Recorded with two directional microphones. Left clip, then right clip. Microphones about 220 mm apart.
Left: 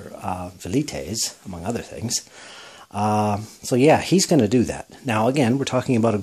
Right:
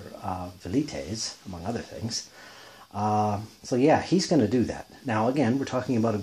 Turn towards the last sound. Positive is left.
turn(degrees=40)  # may be behind; listen again after turning